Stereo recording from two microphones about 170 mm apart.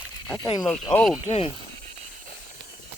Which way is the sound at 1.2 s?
35° left (ahead or behind).